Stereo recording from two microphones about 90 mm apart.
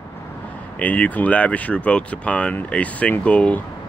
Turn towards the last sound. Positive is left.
turn(degrees=15)  # may be behind; listen again after turning